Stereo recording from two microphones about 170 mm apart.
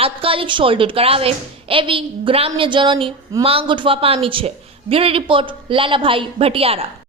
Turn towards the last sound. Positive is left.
turn(degrees=-35)  # may be behind; listen again after turning